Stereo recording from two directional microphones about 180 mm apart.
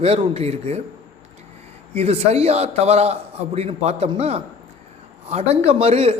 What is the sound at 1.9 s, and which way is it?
Speech, 35° right (ahead or behind).